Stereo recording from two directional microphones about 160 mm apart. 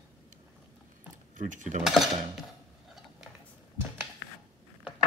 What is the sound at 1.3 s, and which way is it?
Speech, 50° right (ahead or behind).